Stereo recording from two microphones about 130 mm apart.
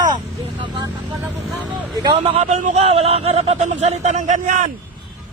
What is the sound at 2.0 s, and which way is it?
Speech, 35° right (ahead or behind).